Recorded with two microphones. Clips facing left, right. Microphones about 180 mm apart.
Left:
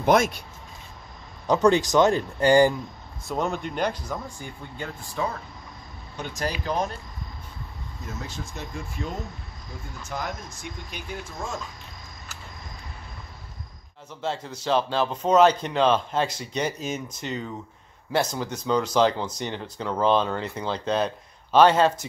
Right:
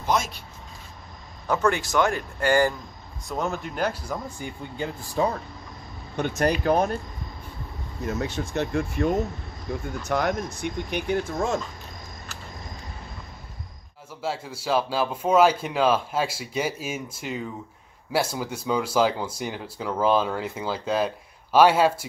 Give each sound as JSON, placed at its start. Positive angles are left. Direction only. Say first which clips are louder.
{"t": 0.0, "sound": "speech", "louder": "left 6 dB", "side_deg": 55}
{"t": 1.5, "sound": "speech", "louder": "left 4 dB", "side_deg": 20}
{"t": 3.3, "sound": "speech", "louder": "left 1 dB", "side_deg": 0}
{"t": 4.7, "sound": "speech", "louder": "right 5 dB", "side_deg": -30}
{"t": 6.1, "sound": "speech", "louder": "right 7 dB", "side_deg": -60}
{"t": 8.0, "sound": "speech", "louder": "right 9 dB", "side_deg": -65}
{"t": 14.2, "sound": "speech", "louder": "even", "side_deg": -5}